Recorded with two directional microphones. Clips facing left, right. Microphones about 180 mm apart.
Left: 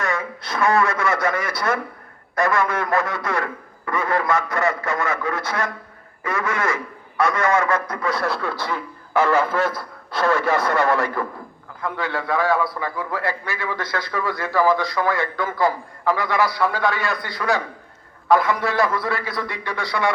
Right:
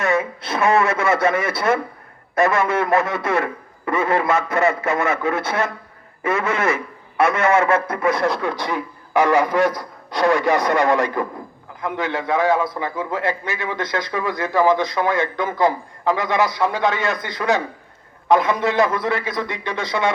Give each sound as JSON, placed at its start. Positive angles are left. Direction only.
{"t": 0.0, "sound": "a man's voice", "side_deg": -20}